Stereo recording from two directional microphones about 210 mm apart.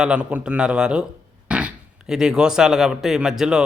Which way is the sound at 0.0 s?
5° right (ahead or behind).